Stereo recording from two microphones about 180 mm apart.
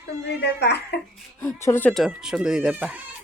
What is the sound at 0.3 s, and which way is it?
Speech, 65° left (ahead or behind).